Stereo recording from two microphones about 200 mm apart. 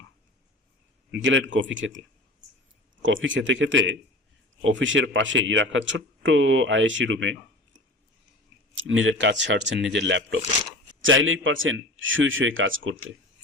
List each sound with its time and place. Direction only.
1.1 s speech: 70° right (ahead or behind)
3.0 s speech: 70° right (ahead or behind)
8.7 s speech: 75° right (ahead or behind)